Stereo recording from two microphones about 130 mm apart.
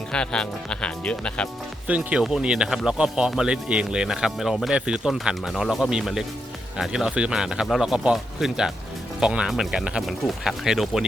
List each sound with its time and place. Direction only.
0.1 s speech: 5° left (ahead or behind)
1.9 s speech: 10° right (ahead or behind)